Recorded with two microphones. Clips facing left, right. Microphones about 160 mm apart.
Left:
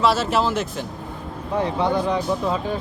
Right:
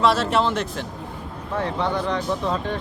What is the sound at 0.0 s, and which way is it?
Speech, centre (ahead or behind).